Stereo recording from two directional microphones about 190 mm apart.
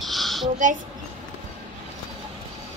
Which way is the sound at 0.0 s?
Centre (ahead or behind).